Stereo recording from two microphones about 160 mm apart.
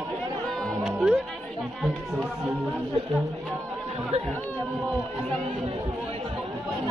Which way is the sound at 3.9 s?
40° right (ahead or behind).